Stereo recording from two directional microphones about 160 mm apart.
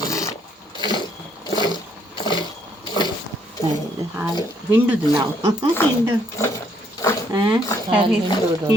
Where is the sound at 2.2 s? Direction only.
30° left (ahead or behind).